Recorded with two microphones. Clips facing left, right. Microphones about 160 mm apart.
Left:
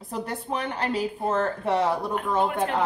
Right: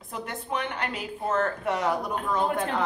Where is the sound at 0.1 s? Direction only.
35° left (ahead or behind).